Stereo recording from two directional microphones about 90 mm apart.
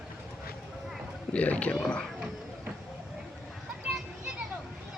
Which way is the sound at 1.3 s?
15° left (ahead or behind).